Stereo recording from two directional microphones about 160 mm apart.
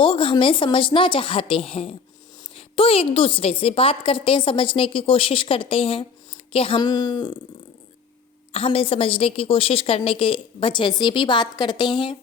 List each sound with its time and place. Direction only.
0.0 s a woman's voice: 35° left (ahead or behind)
8.5 s a woman's voice: 35° left (ahead or behind)